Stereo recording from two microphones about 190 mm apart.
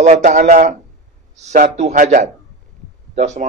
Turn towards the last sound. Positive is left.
turn(degrees=-40)  # may be behind; listen again after turning